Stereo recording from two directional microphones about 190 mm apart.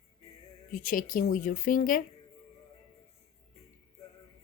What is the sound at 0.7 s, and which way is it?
Speech, 45° left (ahead or behind).